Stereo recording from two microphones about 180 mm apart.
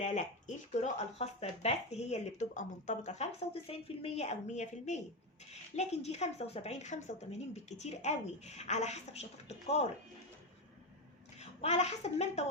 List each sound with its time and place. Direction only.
0.0 s a woman's voice: 40° left (ahead or behind)
11.6 s a woman's voice: 40° left (ahead or behind)